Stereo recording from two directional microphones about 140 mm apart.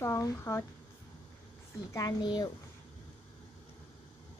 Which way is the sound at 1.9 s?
25° left (ahead or behind).